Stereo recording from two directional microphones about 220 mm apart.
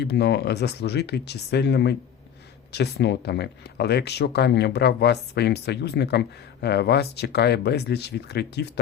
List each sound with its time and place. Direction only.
0.0 s speech: 50° left (ahead or behind)